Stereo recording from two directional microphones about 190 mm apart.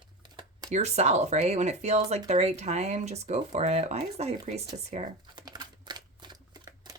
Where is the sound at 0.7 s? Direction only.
35° right (ahead or behind).